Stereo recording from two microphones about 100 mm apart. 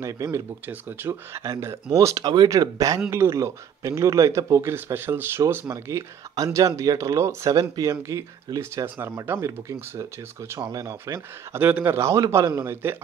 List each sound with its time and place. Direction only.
0.0 s speech: 30° right (ahead or behind)
5.7 s speech: 35° right (ahead or behind)